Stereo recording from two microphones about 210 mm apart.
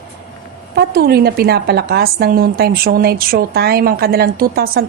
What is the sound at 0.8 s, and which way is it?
A woman's voice, 45° right (ahead or behind).